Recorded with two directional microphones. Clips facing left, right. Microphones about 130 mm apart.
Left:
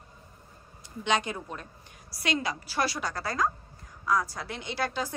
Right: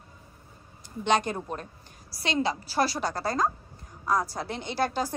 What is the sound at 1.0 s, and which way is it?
Speech, 45° right (ahead or behind).